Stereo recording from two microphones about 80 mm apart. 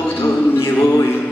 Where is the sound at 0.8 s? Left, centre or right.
Left.